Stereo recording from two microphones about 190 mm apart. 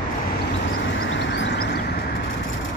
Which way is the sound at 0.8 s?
80° left.